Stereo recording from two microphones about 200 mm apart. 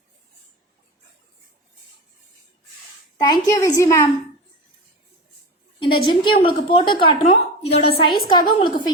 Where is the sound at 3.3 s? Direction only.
15° left (ahead or behind).